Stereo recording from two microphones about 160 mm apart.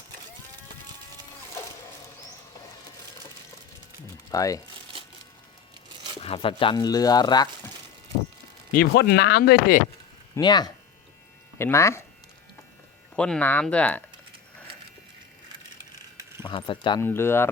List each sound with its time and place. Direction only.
4.3 s speech: 20° left (ahead or behind)
6.2 s speech: 35° left (ahead or behind)
8.7 s speech: 75° left (ahead or behind)
10.3 s speech: 25° left (ahead or behind)
11.5 s speech: 15° left (ahead or behind)
13.1 s speech: 5° left (ahead or behind)
16.4 s speech: 30° left (ahead or behind)
17.0 s speech: 15° left (ahead or behind)